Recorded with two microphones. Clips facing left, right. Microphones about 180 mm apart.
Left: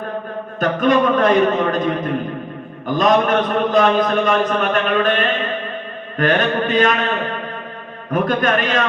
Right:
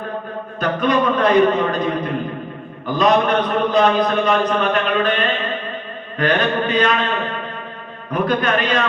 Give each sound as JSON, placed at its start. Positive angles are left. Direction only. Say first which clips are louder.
{"t": 0.6, "sound": "a man's voice", "louder": "left 2 dB", "side_deg": 45}
{"t": 8.1, "sound": "a man's voice", "louder": "left 1 dB", "side_deg": 45}